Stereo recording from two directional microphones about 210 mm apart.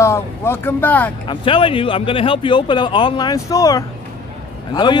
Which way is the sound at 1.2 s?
25° left (ahead or behind).